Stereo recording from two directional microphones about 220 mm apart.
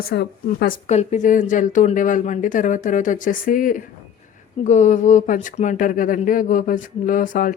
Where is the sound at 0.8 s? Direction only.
30° left (ahead or behind).